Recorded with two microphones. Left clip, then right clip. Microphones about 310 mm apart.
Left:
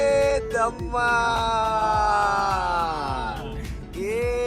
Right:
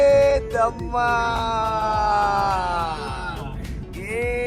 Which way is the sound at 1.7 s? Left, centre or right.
Centre.